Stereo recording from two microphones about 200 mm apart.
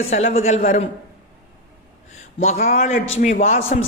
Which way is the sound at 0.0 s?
30° left (ahead or behind).